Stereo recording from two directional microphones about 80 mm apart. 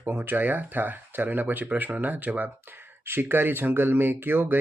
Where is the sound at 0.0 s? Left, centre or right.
Right.